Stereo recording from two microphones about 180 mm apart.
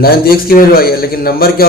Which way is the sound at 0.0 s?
55° left (ahead or behind).